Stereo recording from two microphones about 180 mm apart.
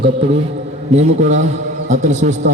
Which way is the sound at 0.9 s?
40° right (ahead or behind).